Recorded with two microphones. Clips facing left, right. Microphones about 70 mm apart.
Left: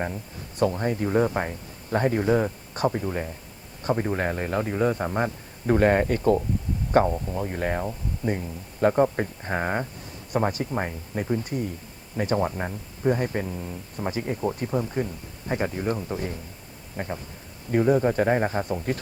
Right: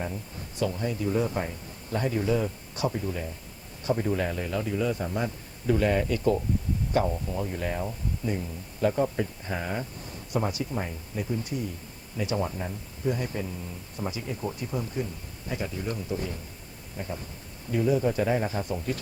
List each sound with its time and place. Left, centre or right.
0.6 s speech: left